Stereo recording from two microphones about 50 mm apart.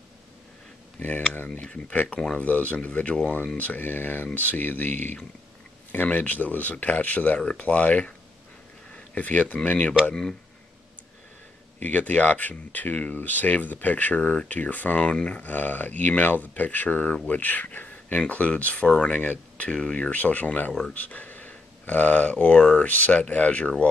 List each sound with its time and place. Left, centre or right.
0.9 s speech: left
1.6 s speech: left
2.4 s speech: left
7.3 s speech: left
7.6 s speech: left
11.8 s speech: left
15.0 s speech: left
19.1 s speech: left